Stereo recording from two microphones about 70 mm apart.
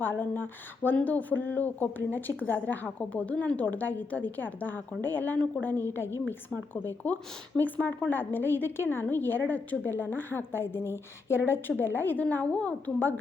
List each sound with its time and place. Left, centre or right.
0.0 s speech: left
6.8 s a woman's voice: left